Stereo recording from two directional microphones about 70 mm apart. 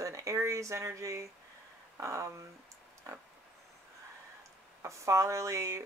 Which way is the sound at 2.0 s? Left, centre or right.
Right.